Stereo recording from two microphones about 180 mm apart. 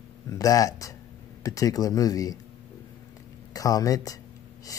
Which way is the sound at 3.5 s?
20° left (ahead or behind).